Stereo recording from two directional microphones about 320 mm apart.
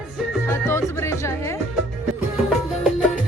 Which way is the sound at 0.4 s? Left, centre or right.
Centre.